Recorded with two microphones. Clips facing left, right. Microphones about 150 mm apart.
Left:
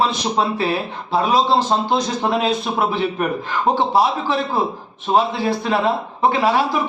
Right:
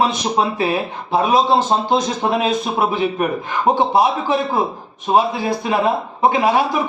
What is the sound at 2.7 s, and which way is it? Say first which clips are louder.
A man's voice: right 2 dB; 15° right (ahead or behind).